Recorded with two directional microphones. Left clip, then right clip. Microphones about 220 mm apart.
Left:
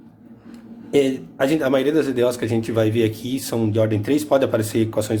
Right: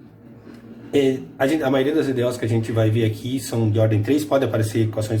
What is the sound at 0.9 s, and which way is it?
A man's voice, 40° left (ahead or behind).